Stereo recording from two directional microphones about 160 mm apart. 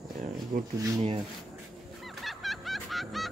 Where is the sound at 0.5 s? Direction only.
65° right (ahead or behind).